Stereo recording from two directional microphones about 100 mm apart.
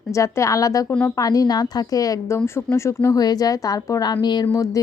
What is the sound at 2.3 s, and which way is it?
Speech, 25° left (ahead or behind).